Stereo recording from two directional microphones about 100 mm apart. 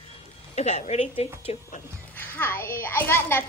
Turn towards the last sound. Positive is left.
turn(degrees=25)  # may be behind; listen again after turning